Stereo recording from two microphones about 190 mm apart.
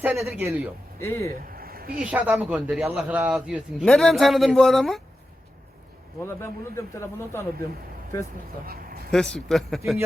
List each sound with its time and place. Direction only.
0.0 s speech: 5° right (ahead or behind)
1.0 s speech: 10° left (ahead or behind)
1.5 s a sound: 50° right (ahead or behind)
2.0 s a man's voice: 5° right (ahead or behind)
6.2 s speech: 15° left (ahead or behind)
8.6 s a man's voice: 50° right (ahead or behind)
9.1 s a man's voice: 5° left (ahead or behind)